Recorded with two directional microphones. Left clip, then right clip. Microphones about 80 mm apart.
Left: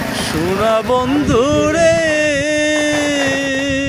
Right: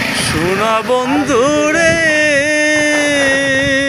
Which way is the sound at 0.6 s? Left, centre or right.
Left.